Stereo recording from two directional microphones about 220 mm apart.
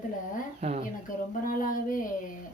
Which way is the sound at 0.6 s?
30° right (ahead or behind).